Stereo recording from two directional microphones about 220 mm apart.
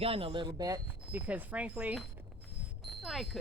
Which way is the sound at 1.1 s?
5° right (ahead or behind).